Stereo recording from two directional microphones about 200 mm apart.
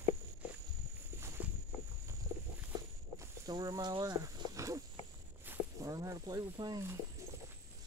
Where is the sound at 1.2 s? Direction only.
10° right (ahead or behind).